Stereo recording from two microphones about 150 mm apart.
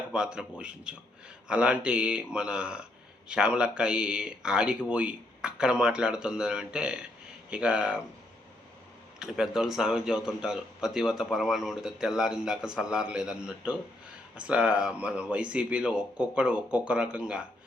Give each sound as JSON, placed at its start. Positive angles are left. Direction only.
{"t": 0.1, "sound": "a man's voice", "side_deg": -5}
{"t": 9.1, "sound": "a man's voice", "side_deg": -5}